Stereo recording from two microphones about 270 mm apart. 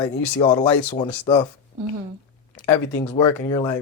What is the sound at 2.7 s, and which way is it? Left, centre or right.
Speech, centre.